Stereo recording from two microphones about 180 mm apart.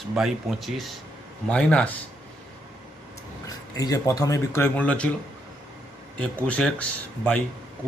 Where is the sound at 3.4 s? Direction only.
20° left (ahead or behind).